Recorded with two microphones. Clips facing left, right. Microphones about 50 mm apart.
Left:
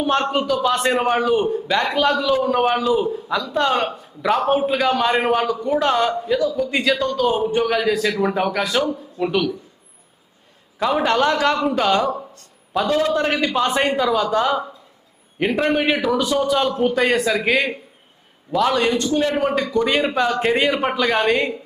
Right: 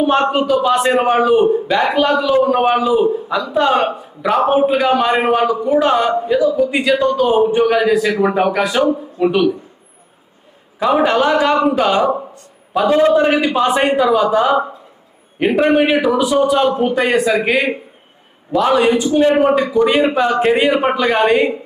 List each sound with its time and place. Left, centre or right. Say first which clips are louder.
0.0 s a man's voice: right 5 dB; centre
10.8 s a man's voice: right 4 dB; centre
14.5 s speech: right 7 dB; right
15.4 s a man's voice: right 6 dB; centre